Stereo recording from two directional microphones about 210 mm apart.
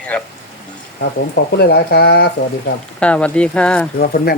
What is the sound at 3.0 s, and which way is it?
Speech, 5° left (ahead or behind).